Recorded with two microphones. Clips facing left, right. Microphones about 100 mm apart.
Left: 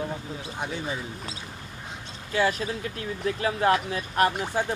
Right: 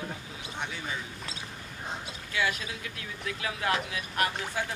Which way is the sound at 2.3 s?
35° left (ahead or behind).